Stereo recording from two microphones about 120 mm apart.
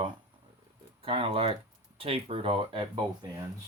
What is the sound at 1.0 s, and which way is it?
Speech, 50° right (ahead or behind).